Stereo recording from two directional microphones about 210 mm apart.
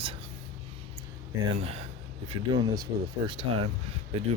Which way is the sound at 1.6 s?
30° right (ahead or behind).